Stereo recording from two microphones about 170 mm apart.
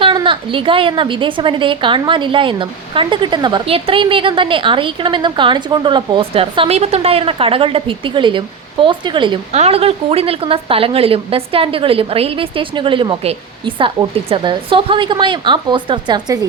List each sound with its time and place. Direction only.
0.0 s a woman's voice: 30° right (ahead or behind)